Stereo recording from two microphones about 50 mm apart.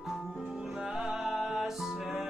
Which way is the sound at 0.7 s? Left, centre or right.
Centre.